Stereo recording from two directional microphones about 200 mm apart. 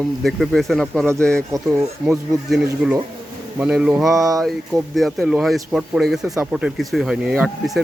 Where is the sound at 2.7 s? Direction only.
15° right (ahead or behind).